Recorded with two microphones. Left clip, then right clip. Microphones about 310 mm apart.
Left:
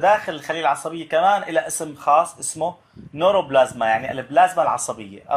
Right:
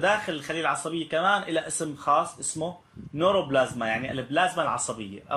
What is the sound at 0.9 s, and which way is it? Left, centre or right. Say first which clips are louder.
A man's voice: left 6 dB; centre.